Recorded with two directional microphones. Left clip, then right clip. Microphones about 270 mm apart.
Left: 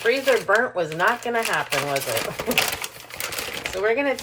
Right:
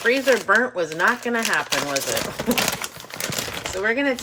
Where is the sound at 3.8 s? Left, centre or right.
Right.